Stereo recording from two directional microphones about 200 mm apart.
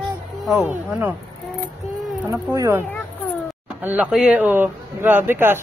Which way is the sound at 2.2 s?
10° right (ahead or behind).